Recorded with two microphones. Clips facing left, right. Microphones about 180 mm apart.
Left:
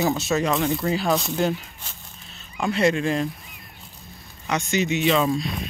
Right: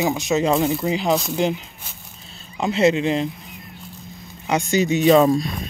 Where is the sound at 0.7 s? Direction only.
15° right (ahead or behind).